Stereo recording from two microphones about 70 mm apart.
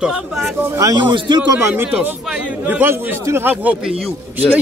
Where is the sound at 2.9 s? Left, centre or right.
Right.